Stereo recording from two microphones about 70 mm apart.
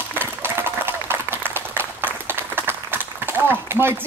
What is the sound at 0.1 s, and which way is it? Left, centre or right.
Applause, right.